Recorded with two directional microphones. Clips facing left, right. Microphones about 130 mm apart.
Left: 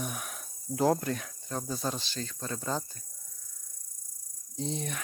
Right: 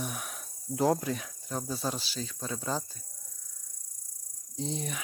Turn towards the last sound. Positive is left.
turn(degrees=0)  # may be behind; listen again after turning